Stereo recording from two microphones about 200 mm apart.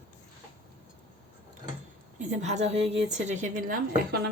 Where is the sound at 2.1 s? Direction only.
35° right (ahead or behind).